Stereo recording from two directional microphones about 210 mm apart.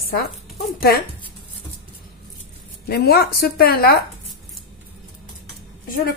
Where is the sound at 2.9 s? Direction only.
45° left (ahead or behind).